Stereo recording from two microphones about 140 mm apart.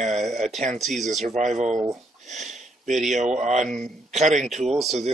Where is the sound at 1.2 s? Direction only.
60° right (ahead or behind).